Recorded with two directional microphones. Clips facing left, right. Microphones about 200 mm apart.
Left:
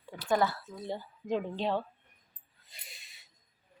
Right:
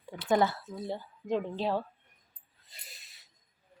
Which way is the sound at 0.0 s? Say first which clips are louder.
Right 2 dB; 20° right (ahead or behind).